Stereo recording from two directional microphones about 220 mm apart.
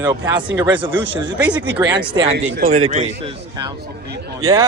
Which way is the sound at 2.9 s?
30° right (ahead or behind).